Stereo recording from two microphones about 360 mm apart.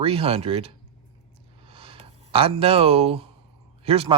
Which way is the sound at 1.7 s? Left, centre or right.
Centre.